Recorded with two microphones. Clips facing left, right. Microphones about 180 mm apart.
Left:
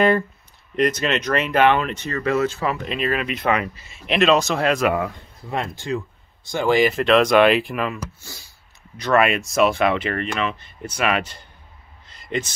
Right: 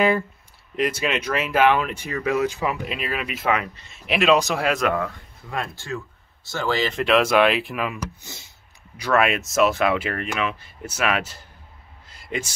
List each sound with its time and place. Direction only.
0.7 s speech: 5° right (ahead or behind)
4.8 s speech: 15° left (ahead or behind)
7.0 s speech: 5° right (ahead or behind)
8.2 s speech: 20° right (ahead or behind)
8.9 s speech: 5° right (ahead or behind)
12.1 s a sound: 5° right (ahead or behind)